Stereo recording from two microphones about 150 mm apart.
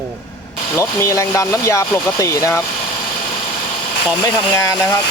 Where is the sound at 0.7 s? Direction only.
20° left (ahead or behind).